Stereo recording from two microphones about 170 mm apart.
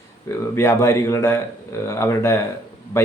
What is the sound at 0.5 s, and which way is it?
Speech, 15° left (ahead or behind).